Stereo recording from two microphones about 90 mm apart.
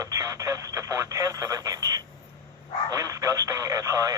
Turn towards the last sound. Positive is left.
turn(degrees=-40)  # may be behind; listen again after turning